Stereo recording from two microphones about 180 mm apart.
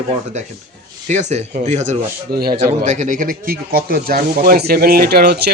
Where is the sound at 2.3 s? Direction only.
60° right (ahead or behind).